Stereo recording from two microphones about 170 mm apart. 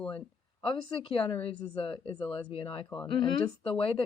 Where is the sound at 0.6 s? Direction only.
30° left (ahead or behind).